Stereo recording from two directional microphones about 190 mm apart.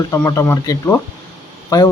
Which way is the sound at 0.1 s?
15° left (ahead or behind).